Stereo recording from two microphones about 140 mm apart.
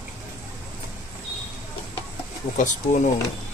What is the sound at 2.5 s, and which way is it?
Speech, 65° left (ahead or behind).